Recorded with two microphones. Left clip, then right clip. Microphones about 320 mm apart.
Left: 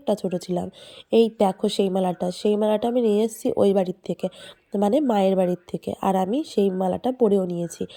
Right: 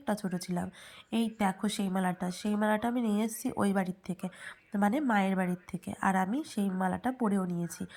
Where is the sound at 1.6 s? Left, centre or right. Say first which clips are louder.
Left 11 dB; centre.